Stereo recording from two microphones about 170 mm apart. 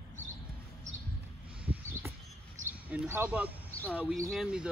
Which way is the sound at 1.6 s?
10° right (ahead or behind).